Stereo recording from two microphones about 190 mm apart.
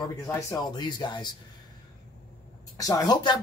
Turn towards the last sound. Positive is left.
turn(degrees=20)  # may be behind; listen again after turning